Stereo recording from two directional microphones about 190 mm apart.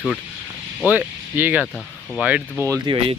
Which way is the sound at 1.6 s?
5° left (ahead or behind).